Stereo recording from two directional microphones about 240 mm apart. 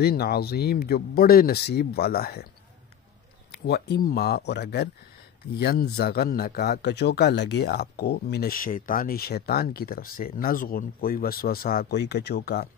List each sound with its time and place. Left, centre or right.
0.0 s speech: left
3.5 s speech: left